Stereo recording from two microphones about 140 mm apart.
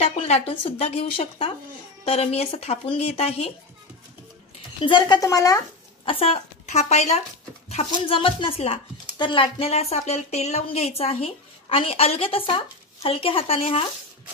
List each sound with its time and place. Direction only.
0.0 s a woman's voice: 50° left (ahead or behind)
4.6 s a woman's voice: 35° left (ahead or behind)
6.0 s a woman's voice: 45° left (ahead or behind)